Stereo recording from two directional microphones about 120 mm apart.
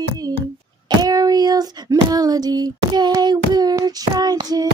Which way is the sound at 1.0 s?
30° right (ahead or behind).